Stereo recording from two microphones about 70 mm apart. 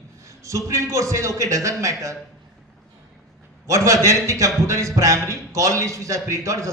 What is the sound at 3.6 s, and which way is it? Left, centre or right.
A man's voice, right.